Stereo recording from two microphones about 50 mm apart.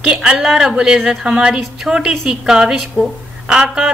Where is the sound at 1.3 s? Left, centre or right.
Centre.